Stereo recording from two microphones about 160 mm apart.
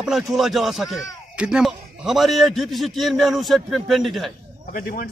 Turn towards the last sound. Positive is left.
turn(degrees=60)  # may be behind; listen again after turning